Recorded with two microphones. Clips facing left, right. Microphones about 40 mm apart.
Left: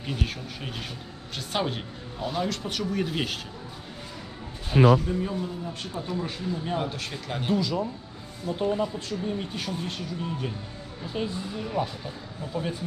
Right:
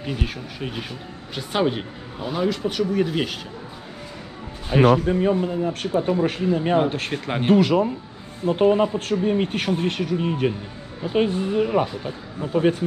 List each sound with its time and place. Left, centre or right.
0.0 s speech: centre
4.7 s speech: right
11.0 s speech: right
11.2 s speech: right